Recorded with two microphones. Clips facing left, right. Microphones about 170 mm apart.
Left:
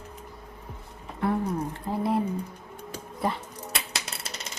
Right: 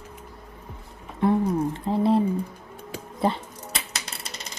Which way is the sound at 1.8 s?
25° right (ahead or behind).